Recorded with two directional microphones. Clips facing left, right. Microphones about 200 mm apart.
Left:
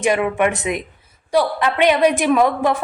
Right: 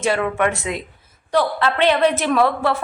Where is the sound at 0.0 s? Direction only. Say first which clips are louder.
Left 2 dB; 15° left (ahead or behind).